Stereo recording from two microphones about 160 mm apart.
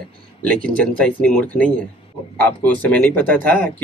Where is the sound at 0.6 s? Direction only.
5° left (ahead or behind).